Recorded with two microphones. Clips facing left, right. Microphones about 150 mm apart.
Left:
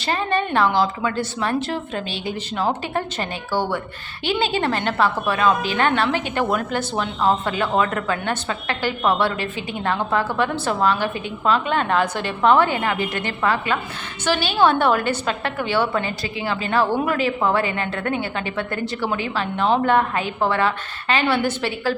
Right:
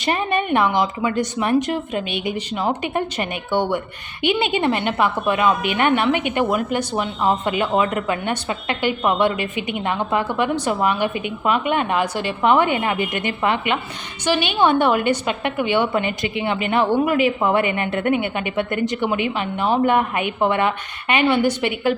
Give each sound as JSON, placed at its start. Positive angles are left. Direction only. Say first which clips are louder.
{"t": 0.0, "sound": "a woman's voice", "louder": "right 1 dB", "side_deg": -20}
{"t": 4.6, "sound": "a woman's voice", "louder": "right 1 dB", "side_deg": -15}